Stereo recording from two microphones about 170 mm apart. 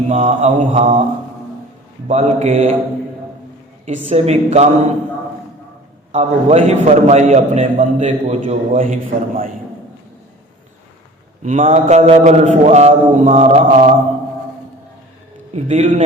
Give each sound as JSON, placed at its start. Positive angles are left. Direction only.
{"t": 0.1, "sound": "a man's voice", "side_deg": -40}
{"t": 2.0, "sound": "a man's voice", "side_deg": -40}
{"t": 3.8, "sound": "a man's voice", "side_deg": -40}
{"t": 6.1, "sound": "a man's voice", "side_deg": -40}
{"t": 11.4, "sound": "mantra", "side_deg": -45}
{"t": 15.5, "sound": "a man's voice", "side_deg": -35}